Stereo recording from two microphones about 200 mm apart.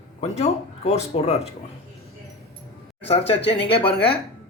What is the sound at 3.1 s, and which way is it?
Speech, 30° left (ahead or behind).